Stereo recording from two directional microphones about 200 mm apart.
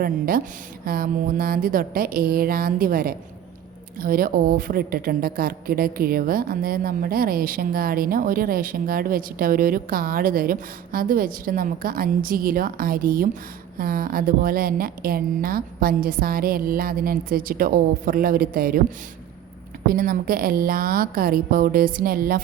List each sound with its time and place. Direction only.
0.0 s a woman's voice: 45° right (ahead or behind)
19.9 s a woman's voice: 45° right (ahead or behind)